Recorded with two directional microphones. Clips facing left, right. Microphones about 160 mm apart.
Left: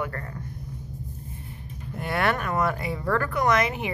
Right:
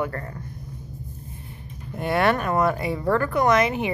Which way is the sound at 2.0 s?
25° right (ahead or behind).